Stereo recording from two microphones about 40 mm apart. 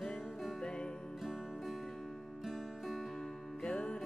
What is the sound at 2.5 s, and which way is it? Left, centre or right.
Music, centre.